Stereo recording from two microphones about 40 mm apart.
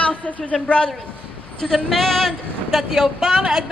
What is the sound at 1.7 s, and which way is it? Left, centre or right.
Speech, centre.